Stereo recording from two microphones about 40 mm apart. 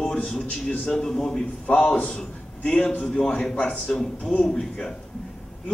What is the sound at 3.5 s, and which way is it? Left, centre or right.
A man's voice, left.